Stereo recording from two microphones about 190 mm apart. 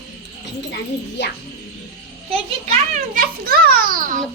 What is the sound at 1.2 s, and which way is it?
Speech, 65° left (ahead or behind).